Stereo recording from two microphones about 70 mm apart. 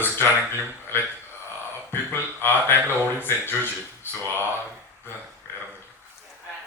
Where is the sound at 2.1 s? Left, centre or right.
Left.